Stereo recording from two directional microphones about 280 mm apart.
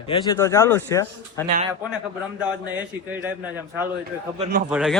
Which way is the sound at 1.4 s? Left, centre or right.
Right.